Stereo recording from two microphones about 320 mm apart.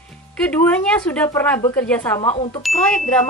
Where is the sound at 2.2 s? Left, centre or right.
Centre.